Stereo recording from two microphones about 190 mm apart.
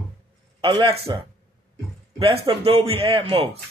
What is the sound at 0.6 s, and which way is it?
Speech, 25° right (ahead or behind).